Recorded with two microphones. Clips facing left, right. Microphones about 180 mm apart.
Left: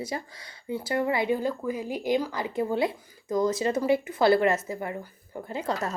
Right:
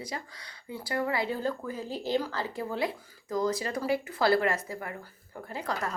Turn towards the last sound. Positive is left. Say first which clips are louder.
# left 4 dB
turn(degrees=25)  # may be behind; listen again after turning